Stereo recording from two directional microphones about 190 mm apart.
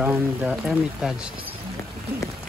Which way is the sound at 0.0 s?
5° right (ahead or behind).